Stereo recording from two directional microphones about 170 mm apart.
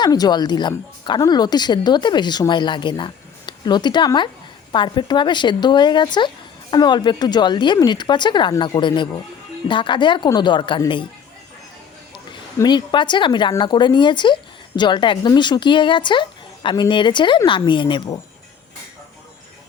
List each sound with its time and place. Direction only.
0.0 s speech: 25° left (ahead or behind)
12.5 s speech: 25° left (ahead or behind)